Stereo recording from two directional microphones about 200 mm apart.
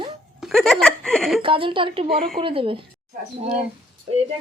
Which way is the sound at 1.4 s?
25° right (ahead or behind).